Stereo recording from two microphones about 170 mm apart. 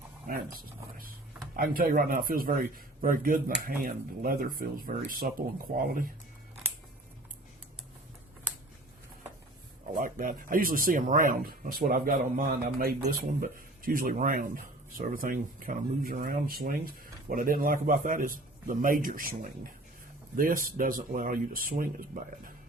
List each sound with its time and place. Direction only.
1.5 s speech: 55° right (ahead or behind)
10.0 s speech: 55° right (ahead or behind)